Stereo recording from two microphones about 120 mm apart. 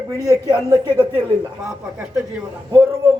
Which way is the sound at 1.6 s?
Centre (ahead or behind).